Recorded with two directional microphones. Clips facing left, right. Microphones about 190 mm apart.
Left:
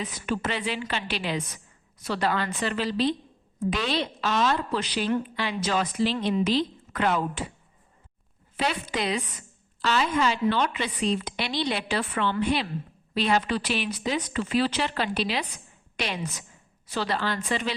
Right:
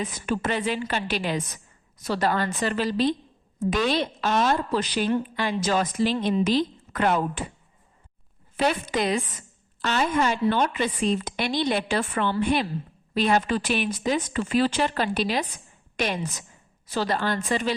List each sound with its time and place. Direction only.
0.0 s a woman's voice: 45° right (ahead or behind)
8.5 s a woman's voice: 45° right (ahead or behind)